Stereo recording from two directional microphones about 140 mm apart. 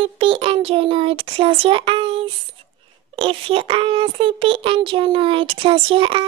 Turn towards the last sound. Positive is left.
turn(degrees=-40)  # may be behind; listen again after turning